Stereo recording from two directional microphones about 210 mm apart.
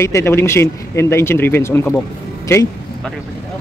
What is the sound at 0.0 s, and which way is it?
A man's voice, 10° left (ahead or behind).